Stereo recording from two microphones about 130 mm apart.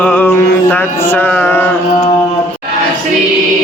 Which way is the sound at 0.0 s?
10° left (ahead or behind).